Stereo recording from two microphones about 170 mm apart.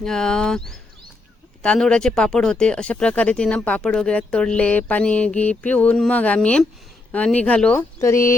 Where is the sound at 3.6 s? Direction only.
10° left (ahead or behind).